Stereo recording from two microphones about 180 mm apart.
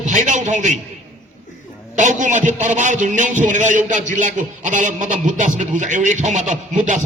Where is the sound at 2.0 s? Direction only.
45° right (ahead or behind).